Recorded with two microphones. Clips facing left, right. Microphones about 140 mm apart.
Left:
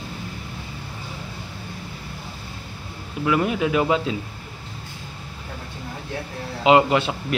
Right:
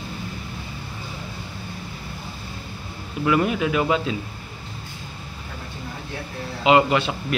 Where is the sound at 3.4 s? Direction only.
20° left (ahead or behind).